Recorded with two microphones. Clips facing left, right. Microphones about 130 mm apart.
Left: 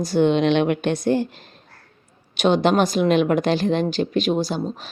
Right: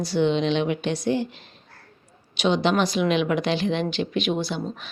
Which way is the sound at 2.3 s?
50° left (ahead or behind).